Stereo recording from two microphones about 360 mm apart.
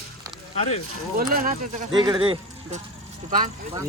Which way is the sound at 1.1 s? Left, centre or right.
Right.